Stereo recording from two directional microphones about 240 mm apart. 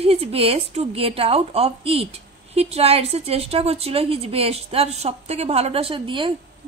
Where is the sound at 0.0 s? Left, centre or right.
Right.